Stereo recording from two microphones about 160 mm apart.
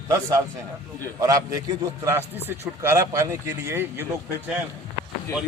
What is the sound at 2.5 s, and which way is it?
Speech, 15° right (ahead or behind).